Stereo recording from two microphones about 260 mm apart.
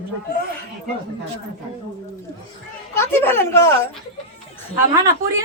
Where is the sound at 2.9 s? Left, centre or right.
Centre.